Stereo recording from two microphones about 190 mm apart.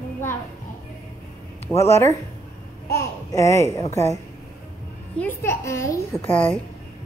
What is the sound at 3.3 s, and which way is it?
Speech, 15° left (ahead or behind).